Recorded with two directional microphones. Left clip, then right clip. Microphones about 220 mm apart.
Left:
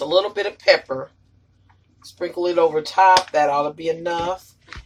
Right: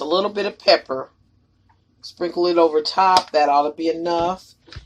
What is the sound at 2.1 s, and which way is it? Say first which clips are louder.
Speech: right 2 dB; 50° right (ahead or behind).